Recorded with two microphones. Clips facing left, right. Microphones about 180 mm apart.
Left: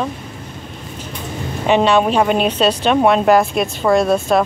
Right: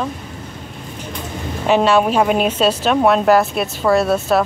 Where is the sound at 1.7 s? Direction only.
5° right (ahead or behind).